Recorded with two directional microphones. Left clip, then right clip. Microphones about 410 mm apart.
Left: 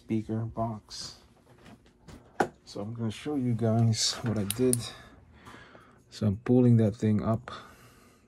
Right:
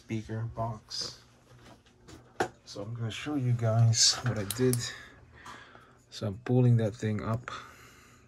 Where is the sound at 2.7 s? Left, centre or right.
Centre.